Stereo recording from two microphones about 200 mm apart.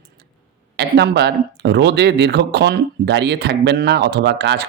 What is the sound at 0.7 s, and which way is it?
Speech, 55° right (ahead or behind).